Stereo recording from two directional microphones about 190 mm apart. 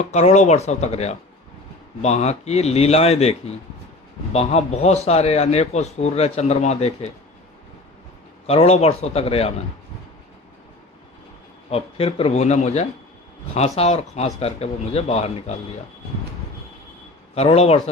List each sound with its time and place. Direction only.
0.1 s a man's voice: 35° left (ahead or behind)
8.4 s a man's voice: 35° left (ahead or behind)
11.7 s a man's voice: 30° left (ahead or behind)
17.3 s a man's voice: 35° left (ahead or behind)